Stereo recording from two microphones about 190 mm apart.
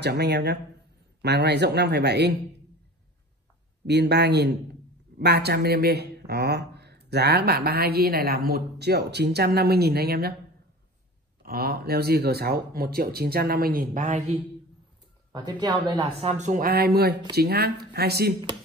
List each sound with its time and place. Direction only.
0.0 s speech: 60° right (ahead or behind)
3.8 s speech: 60° right (ahead or behind)
11.4 s speech: 55° right (ahead or behind)
15.3 s speech: 20° right (ahead or behind); by 18.3 s 55° right (ahead or behind)